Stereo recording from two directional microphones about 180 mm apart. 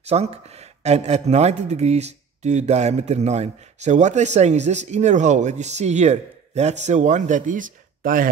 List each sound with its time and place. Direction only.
0.0 s speech: 35° right (ahead or behind)